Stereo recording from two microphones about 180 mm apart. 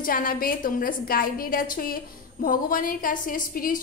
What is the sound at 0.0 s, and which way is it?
A woman's voice, 50° left (ahead or behind).